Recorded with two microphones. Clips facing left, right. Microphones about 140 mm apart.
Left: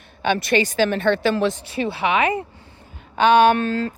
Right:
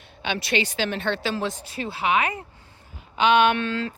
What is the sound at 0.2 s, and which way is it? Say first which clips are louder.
Speech: left 6 dB; 50° left (ahead or behind).